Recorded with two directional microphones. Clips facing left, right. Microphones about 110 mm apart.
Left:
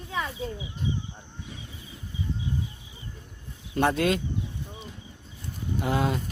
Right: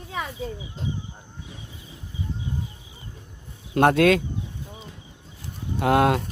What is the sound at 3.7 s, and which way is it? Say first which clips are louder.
Speech: right 6 dB; 75° right (ahead or behind).